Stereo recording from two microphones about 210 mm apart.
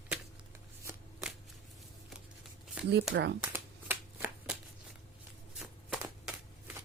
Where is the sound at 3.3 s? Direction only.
10° right (ahead or behind).